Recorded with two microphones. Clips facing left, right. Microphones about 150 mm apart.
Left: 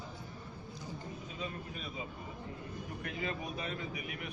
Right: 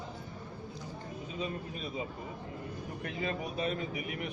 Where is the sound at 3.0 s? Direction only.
30° right (ahead or behind).